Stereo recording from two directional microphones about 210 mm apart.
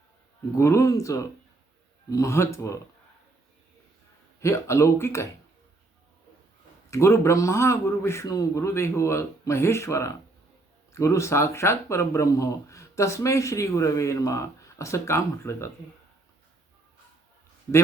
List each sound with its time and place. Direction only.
0.5 s speech: 15° left (ahead or behind)
4.4 s speech: 15° left (ahead or behind)
6.9 s speech: 15° left (ahead or behind)